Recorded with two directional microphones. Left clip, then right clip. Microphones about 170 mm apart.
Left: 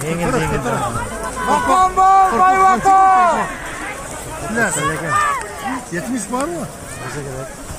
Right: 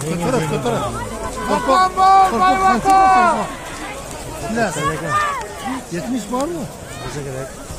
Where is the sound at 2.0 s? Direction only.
35° left (ahead or behind).